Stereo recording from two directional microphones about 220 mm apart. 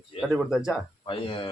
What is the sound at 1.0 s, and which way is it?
Speech, 25° left (ahead or behind).